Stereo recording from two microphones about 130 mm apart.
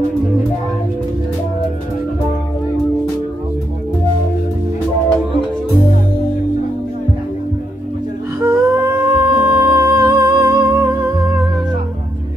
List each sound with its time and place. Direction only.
8.4 s humming: 20° right (ahead or behind)